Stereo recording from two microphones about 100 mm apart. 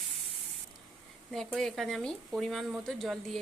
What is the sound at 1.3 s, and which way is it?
Speech, 5° left (ahead or behind).